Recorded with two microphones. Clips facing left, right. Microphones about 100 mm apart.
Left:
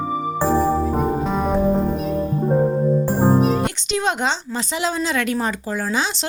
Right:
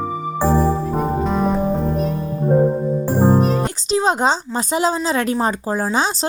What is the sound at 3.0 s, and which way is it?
Music, 15° right (ahead or behind).